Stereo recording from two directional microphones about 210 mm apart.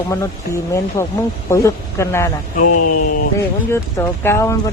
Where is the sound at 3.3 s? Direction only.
10° left (ahead or behind).